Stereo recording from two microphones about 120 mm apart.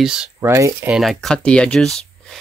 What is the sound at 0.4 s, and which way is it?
Speech, 25° right (ahead or behind).